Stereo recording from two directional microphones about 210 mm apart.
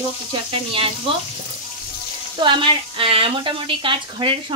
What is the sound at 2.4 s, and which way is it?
Speech, 25° right (ahead or behind).